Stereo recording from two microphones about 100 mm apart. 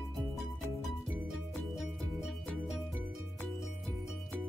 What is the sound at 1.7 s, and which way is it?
Music, centre (ahead or behind).